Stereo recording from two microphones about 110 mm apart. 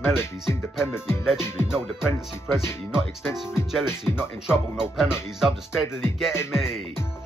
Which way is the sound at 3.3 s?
5° right (ahead or behind).